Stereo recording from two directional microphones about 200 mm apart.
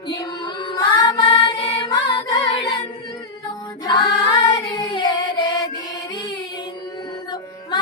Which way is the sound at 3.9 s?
20° left (ahead or behind).